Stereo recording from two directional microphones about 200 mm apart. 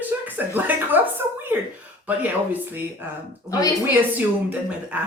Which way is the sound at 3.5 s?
20° left (ahead or behind).